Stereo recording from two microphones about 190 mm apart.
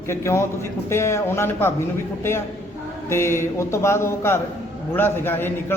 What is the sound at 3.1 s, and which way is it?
A man's voice, 15° left (ahead or behind).